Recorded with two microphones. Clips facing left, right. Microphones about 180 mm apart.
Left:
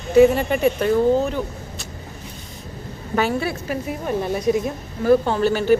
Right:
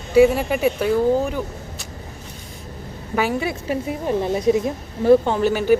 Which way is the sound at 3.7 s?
25° right (ahead or behind).